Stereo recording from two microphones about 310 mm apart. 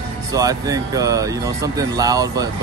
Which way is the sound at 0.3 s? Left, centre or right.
Centre.